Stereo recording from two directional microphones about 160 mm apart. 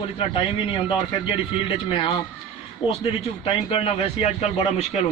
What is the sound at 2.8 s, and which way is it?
A man's voice, 30° left (ahead or behind).